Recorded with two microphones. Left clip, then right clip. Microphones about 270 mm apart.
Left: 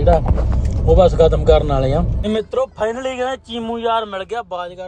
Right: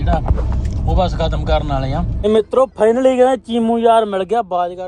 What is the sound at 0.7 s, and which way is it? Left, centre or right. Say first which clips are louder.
Speech: left 7 dB; centre.